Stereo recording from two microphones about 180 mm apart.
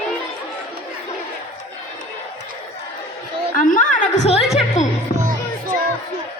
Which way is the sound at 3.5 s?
45° left (ahead or behind).